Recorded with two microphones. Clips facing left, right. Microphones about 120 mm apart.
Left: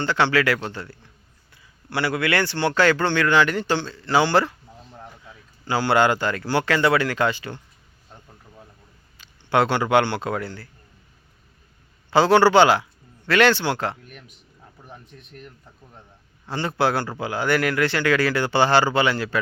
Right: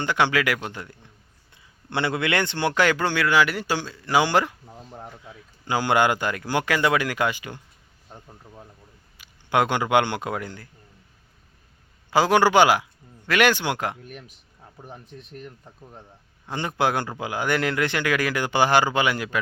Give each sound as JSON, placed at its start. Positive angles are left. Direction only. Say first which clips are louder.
{"t": 0.0, "sound": "speech", "louder": "left 2 dB", "side_deg": -15}
{"t": 9.1, "sound": "a man's voice", "louder": "left 2 dB", "side_deg": -15}
{"t": 12.1, "sound": "speech", "louder": "left 3 dB", "side_deg": -15}
{"t": 16.5, "sound": "speech", "louder": "left 2 dB", "side_deg": -15}